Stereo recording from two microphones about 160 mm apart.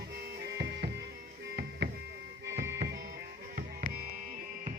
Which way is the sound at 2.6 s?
85° right.